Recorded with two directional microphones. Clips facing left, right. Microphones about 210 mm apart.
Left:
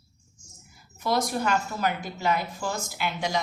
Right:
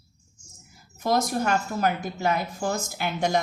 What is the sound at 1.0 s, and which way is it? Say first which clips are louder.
A woman's voice: right 2 dB; 45° right (ahead or behind).